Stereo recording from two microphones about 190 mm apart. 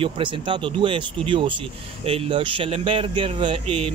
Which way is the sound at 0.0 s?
25° right (ahead or behind).